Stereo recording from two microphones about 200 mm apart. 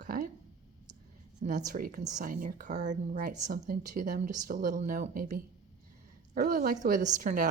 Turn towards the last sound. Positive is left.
turn(degrees=-40)  # may be behind; listen again after turning